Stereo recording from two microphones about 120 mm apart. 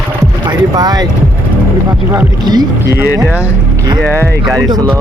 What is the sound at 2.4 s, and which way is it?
Speech, 35° right (ahead or behind).